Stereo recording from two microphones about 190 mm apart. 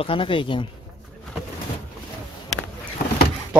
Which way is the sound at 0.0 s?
25° left (ahead or behind).